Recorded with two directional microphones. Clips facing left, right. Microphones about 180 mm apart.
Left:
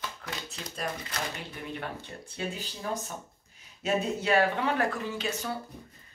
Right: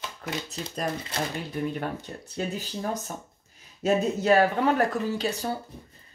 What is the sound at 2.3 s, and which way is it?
Speech, 40° right (ahead or behind).